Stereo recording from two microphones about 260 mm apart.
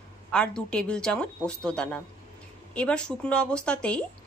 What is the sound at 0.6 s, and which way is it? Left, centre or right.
A woman's voice, centre.